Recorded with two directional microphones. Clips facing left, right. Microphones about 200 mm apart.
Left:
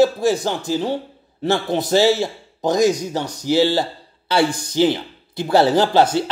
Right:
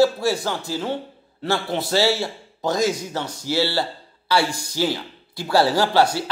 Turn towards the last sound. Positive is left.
turn(degrees=20)  # may be behind; listen again after turning